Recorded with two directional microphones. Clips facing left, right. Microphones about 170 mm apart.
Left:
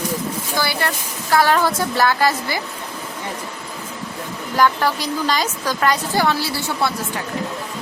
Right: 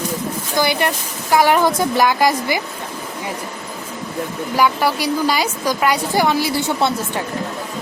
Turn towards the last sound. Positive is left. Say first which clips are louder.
# right 4 dB
turn(degrees=-20)  # may be behind; listen again after turning